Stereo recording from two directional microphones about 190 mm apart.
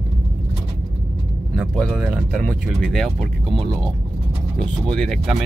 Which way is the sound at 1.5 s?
5° right (ahead or behind).